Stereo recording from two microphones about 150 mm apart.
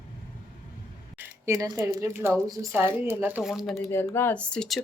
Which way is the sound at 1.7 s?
20° right (ahead or behind).